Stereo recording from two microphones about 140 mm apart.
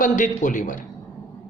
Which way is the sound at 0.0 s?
65° left (ahead or behind).